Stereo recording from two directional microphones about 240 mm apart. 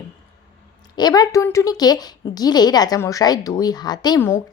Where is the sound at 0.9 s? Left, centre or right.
Centre.